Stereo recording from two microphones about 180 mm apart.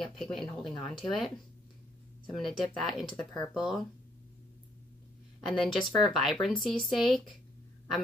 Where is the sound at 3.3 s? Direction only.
15° left (ahead or behind).